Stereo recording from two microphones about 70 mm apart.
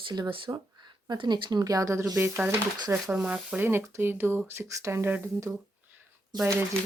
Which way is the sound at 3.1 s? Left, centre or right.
Centre.